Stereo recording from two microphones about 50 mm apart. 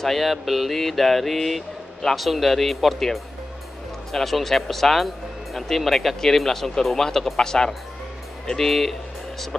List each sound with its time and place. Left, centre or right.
0.0 s speech: centre